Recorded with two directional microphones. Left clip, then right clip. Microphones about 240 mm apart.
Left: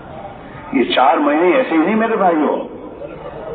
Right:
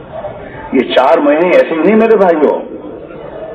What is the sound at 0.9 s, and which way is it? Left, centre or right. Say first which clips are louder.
Speech: right 5 dB; right.